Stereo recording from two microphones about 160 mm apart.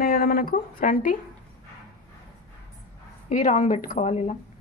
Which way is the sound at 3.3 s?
50° left (ahead or behind).